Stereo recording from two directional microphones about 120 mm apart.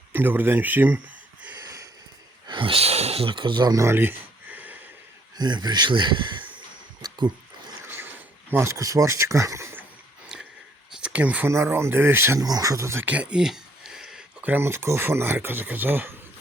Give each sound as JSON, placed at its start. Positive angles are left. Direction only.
{"t": 0.1, "sound": "speech", "side_deg": -15}
{"t": 2.5, "sound": "speech", "side_deg": -45}
{"t": 5.4, "sound": "speech", "side_deg": -35}
{"t": 6.6, "sound": "a sound", "side_deg": -40}
{"t": 7.9, "sound": "a sound", "side_deg": -15}
{"t": 10.9, "sound": "speech", "side_deg": -10}
{"t": 12.4, "sound": "speech", "side_deg": -30}
{"t": 13.1, "sound": "speech", "side_deg": -10}